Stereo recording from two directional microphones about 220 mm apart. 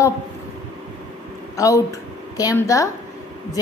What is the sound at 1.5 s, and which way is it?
A woman's voice, 15° left (ahead or behind).